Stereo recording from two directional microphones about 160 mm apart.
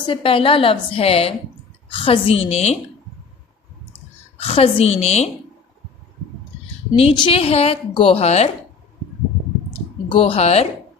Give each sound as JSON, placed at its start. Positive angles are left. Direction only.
{"t": 0.0, "sound": "a woman's voice", "side_deg": 35}
{"t": 4.4, "sound": "a woman's voice", "side_deg": 40}
{"t": 6.9, "sound": "a woman's voice", "side_deg": 35}
{"t": 10.1, "sound": "a woman's voice", "side_deg": 35}